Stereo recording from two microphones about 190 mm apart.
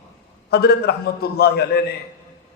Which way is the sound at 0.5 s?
60° left (ahead or behind).